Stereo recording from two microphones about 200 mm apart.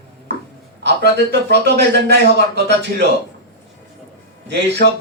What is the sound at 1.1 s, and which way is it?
Speech, 60° right (ahead or behind).